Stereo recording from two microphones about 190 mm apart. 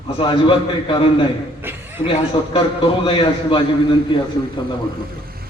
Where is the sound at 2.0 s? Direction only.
30° left (ahead or behind).